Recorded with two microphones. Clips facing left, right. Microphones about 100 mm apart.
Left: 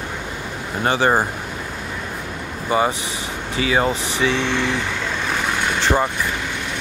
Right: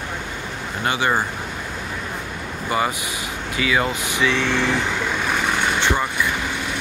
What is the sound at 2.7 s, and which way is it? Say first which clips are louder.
Speech: left 3 dB; 25° left (ahead or behind).